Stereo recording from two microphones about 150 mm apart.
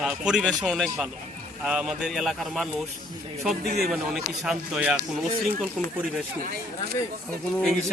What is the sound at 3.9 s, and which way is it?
A man's voice, centre (ahead or behind).